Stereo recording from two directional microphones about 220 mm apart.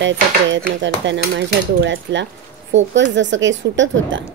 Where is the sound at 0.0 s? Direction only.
55° right (ahead or behind).